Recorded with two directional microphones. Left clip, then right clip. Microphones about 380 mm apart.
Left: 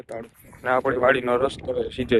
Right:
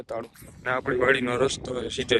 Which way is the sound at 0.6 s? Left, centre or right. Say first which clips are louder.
Left 4 dB; centre.